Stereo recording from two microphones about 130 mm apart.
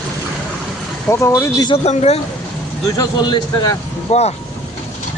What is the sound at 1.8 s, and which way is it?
Speech, 55° left (ahead or behind).